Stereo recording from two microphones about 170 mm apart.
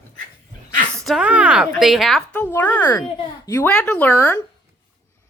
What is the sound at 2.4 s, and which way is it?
A woman's voice, 10° left (ahead or behind).